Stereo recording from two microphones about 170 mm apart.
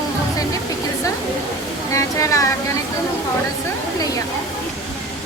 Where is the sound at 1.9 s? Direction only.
20° left (ahead or behind).